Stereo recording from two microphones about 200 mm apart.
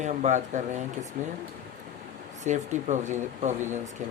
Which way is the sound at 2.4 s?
35° right (ahead or behind).